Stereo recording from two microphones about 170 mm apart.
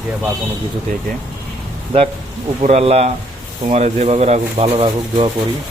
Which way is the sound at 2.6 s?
40° right (ahead or behind).